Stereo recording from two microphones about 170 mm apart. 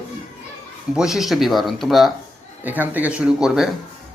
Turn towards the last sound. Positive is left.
turn(degrees=-5)  # may be behind; listen again after turning